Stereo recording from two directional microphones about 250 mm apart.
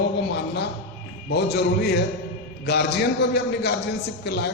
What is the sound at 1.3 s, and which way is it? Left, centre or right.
A man's voice, left.